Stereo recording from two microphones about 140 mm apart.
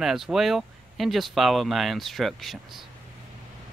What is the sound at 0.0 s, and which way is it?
Speech, 5° right (ahead or behind).